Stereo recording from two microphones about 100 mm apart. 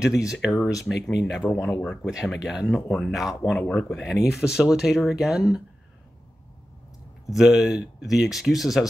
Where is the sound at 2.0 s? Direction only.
5° right (ahead or behind).